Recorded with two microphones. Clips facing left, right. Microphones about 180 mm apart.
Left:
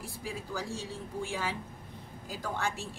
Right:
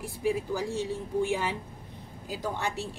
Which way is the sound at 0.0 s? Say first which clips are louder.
Right 11 dB; 20° right (ahead or behind).